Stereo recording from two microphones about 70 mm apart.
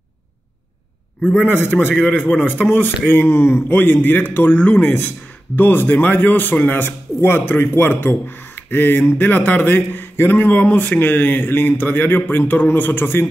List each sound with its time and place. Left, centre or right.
1.2 s a man's voice: left